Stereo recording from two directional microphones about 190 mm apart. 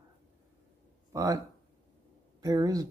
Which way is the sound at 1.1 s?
15° right (ahead or behind).